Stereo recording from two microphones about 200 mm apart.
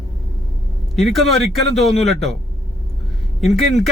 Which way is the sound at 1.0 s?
Centre (ahead or behind).